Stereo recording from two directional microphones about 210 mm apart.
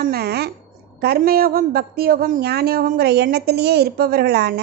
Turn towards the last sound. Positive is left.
turn(degrees=-50)  # may be behind; listen again after turning